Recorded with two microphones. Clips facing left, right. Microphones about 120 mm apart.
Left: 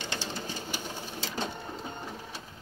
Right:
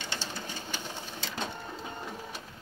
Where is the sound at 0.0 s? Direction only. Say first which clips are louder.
Left 2 dB; 15° left (ahead or behind).